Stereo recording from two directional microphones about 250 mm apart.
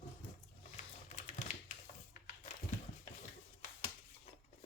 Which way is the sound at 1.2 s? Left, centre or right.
Left.